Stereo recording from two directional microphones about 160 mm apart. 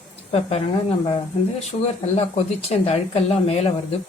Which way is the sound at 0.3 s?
40° left (ahead or behind).